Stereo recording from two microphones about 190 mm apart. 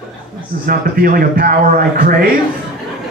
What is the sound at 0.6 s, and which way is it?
A man's voice, 50° right (ahead or behind).